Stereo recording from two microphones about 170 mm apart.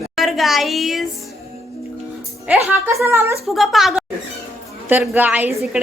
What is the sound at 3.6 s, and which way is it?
A woman's voice, centre (ahead or behind).